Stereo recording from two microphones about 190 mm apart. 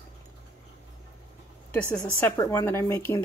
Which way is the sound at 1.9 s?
10° left (ahead or behind).